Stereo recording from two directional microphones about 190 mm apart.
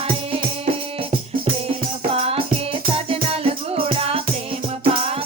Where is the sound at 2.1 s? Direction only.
30° right (ahead or behind).